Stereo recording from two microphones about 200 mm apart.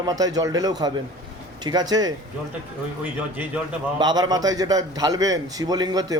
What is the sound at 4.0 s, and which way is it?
A man's voice, 20° right (ahead or behind).